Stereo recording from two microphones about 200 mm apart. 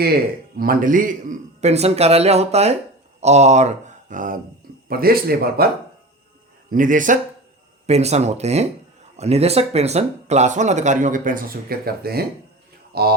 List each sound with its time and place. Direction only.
0.5 s speech: 45° right (ahead or behind)
6.7 s speech: 40° right (ahead or behind)